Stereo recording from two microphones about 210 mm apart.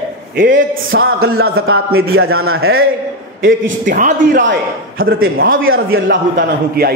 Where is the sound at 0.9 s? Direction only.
75° right (ahead or behind).